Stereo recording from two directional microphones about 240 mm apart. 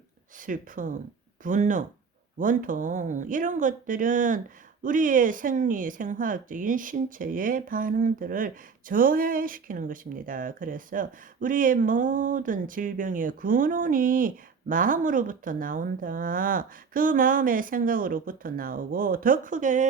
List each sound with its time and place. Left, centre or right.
0.4 s speech: right